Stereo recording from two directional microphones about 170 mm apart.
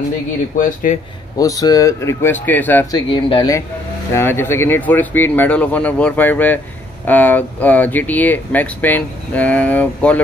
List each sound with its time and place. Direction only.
1.4 s speech: 20° left (ahead or behind)
2.9 s speech: 30° left (ahead or behind)
4.1 s speech: 15° left (ahead or behind)